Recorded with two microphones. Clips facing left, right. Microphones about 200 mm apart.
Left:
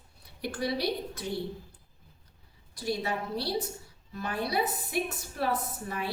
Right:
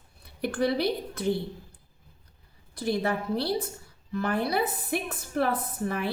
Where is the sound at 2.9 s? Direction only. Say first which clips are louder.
Right 4 dB; 55° right (ahead or behind).